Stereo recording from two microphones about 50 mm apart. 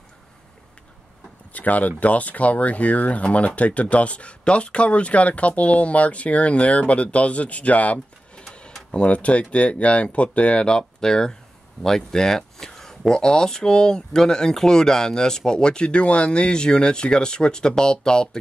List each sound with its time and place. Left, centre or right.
1.5 s speech: left
8.5 s tick-tock: centre
8.9 s speech: left